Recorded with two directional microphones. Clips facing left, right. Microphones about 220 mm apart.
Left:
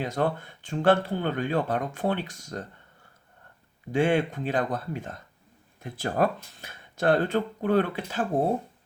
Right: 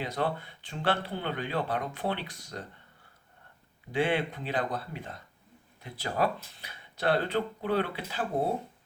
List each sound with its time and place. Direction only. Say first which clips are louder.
0.0 s speech: left 4 dB; 45° left (ahead or behind)
3.9 s speech: left 5 dB; 45° left (ahead or behind)